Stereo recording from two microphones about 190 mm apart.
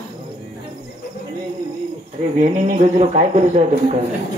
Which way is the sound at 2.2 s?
40° right (ahead or behind).